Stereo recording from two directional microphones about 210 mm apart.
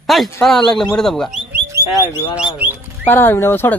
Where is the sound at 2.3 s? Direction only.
10° right (ahead or behind).